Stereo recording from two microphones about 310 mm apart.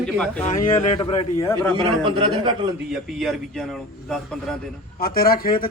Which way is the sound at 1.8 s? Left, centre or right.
Centre.